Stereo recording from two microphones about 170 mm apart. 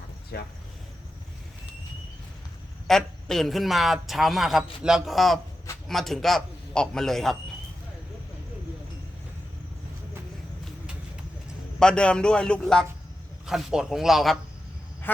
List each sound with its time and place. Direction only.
0.3 s speech: 70° left (ahead or behind)
2.8 s speech: centre (ahead or behind)
11.8 s speech: 5° left (ahead or behind)